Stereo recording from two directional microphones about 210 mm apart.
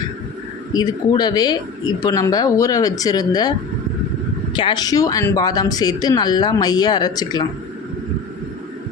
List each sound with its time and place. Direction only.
0.7 s speech: 20° left (ahead or behind)
4.5 s speech: 20° left (ahead or behind)